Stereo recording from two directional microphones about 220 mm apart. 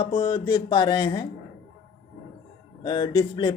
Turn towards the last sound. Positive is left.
turn(degrees=20)  # may be behind; listen again after turning